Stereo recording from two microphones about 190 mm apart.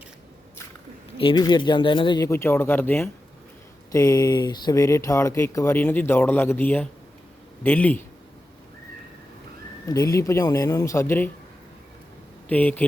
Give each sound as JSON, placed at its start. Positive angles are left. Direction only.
{"t": 1.2, "sound": "speech", "side_deg": 25}
{"t": 9.8, "sound": "speech", "side_deg": 20}
{"t": 12.5, "sound": "speech", "side_deg": 10}